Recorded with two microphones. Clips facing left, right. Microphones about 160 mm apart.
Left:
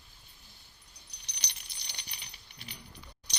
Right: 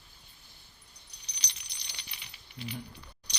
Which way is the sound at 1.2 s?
60° left (ahead or behind).